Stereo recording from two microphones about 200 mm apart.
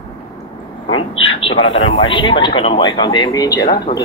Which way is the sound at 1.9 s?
25° left (ahead or behind).